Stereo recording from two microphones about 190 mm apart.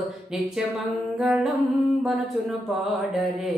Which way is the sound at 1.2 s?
5° right (ahead or behind).